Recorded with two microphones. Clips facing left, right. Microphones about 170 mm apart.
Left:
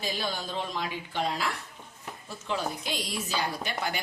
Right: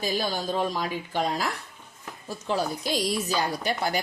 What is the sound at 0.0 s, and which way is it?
Speech, 40° right (ahead or behind).